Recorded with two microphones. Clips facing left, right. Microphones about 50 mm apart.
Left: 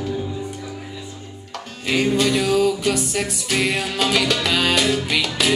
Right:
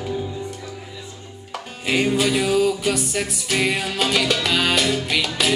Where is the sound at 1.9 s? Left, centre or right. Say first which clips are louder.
Left 1 dB; centre.